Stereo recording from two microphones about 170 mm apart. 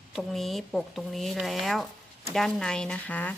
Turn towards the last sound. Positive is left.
turn(degrees=10)  # may be behind; listen again after turning